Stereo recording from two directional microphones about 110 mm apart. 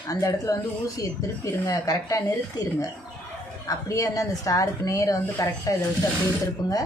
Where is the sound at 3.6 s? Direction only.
30° left (ahead or behind).